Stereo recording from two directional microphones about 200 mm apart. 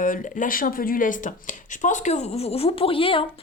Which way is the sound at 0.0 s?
40° left (ahead or behind).